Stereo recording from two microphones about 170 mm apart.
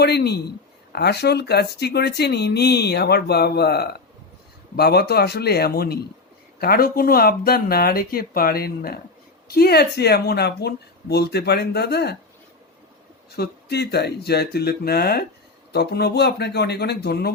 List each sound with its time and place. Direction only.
0.0 s speech: 70° left (ahead or behind)
13.3 s speech: 70° left (ahead or behind)